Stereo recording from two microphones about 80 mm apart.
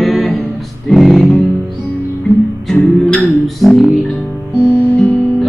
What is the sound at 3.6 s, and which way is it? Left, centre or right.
Music, centre.